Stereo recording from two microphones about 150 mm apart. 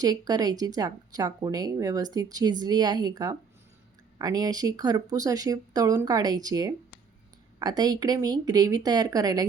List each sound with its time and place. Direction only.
0.0 s speech: 25° right (ahead or behind)